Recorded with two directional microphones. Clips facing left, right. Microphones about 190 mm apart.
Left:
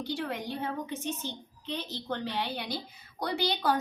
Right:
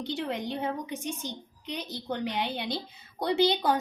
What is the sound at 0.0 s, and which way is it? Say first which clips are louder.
A woman's voice: right 2 dB; 20° right (ahead or behind).